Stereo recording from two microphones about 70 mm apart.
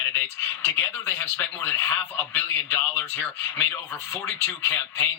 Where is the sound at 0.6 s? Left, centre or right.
Left.